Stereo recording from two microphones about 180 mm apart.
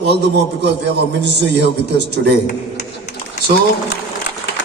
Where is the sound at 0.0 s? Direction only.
70° right (ahead or behind).